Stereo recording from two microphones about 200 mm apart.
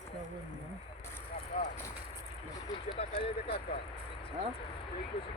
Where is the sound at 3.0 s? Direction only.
30° left (ahead or behind).